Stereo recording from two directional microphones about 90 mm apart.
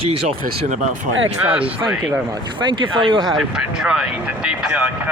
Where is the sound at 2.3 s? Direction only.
60° right (ahead or behind).